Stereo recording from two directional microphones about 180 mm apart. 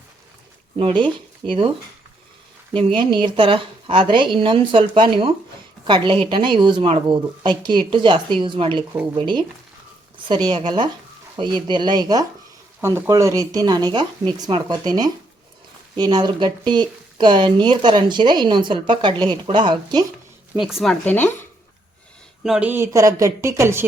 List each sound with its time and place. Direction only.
0.8 s speech: 30° right (ahead or behind)
2.7 s speech: 30° right (ahead or behind)
20.6 s speech: centre (ahead or behind)
21.0 s speech: 10° left (ahead or behind)
22.4 s speech: 5° right (ahead or behind)